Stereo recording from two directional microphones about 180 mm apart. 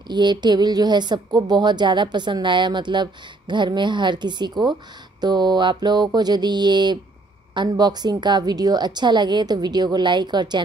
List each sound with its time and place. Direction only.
0.1 s speech: 25° right (ahead or behind)